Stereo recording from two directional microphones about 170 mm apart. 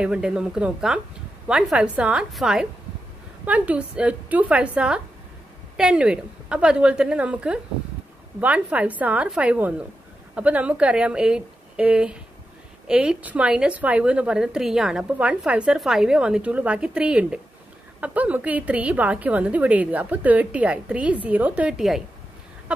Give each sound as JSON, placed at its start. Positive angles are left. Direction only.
{"t": 0.0, "sound": "a woman's voice", "side_deg": -5}